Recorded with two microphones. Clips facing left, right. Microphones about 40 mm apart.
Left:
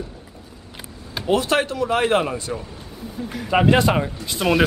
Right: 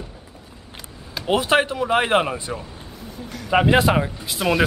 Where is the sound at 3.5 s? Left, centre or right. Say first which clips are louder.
Even; centre.